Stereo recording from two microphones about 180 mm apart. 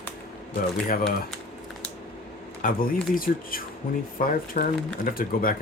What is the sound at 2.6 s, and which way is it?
Speech, 50° left (ahead or behind).